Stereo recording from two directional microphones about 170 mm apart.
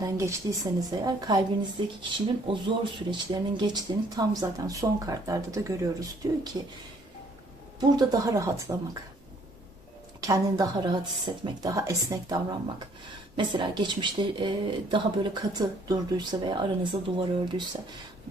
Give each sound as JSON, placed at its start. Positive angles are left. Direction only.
{"t": 0.0, "sound": "speech", "side_deg": -20}
{"t": 7.8, "sound": "speech", "side_deg": -25}
{"t": 10.2, "sound": "speech", "side_deg": -20}